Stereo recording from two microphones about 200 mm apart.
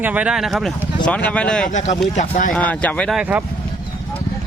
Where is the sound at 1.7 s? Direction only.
35° left (ahead or behind).